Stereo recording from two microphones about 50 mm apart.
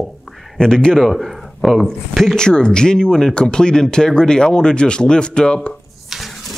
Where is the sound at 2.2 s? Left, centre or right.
Centre.